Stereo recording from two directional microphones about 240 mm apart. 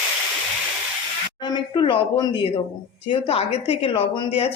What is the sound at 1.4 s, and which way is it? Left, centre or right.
A woman's voice, centre.